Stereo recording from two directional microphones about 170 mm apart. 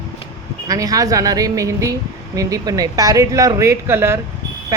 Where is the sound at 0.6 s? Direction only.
20° right (ahead or behind).